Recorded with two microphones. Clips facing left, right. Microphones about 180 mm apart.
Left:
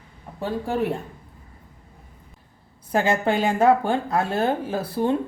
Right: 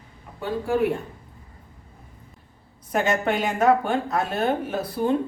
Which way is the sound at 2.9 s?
30° left (ahead or behind).